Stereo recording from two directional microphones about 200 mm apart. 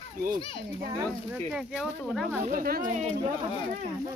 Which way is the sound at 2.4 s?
45° right (ahead or behind).